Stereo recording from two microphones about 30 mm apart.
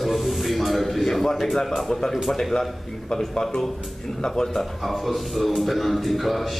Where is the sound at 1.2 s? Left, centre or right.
Centre.